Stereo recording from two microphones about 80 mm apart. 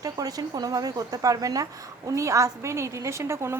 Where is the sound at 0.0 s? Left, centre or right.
Right.